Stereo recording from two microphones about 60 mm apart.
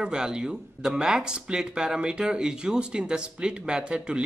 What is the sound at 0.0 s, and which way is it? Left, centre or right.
Speech, centre.